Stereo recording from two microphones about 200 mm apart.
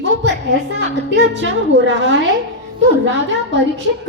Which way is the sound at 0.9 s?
60° right (ahead or behind).